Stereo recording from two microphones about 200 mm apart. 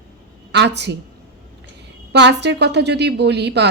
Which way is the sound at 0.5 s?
60° right (ahead or behind).